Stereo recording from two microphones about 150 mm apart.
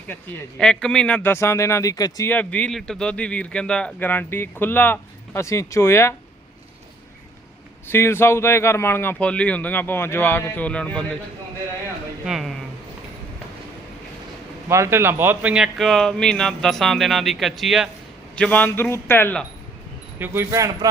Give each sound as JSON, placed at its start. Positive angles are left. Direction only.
{"t": 0.6, "sound": "speech", "side_deg": 5}
{"t": 2.3, "sound": "speech", "side_deg": 10}
{"t": 7.9, "sound": "speech", "side_deg": 15}
{"t": 12.2, "sound": "speech", "side_deg": 0}
{"t": 14.7, "sound": "speech", "side_deg": -20}
{"t": 20.1, "sound": "speech", "side_deg": -15}